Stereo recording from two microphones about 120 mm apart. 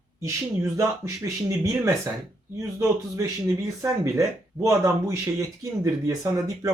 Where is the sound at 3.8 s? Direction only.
25° right (ahead or behind).